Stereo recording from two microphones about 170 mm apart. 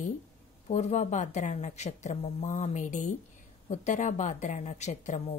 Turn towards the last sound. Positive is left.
turn(degrees=40)  # may be behind; listen again after turning